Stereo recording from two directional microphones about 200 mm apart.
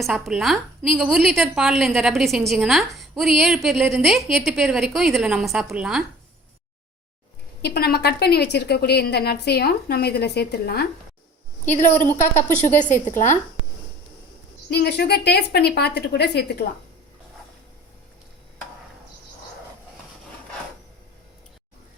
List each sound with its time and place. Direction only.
0.0 s a woman's voice: centre (ahead or behind)
7.6 s a woman's voice: 50° left (ahead or behind)
11.7 s a woman's voice: 40° left (ahead or behind)
14.7 s a woman's voice: 55° left (ahead or behind)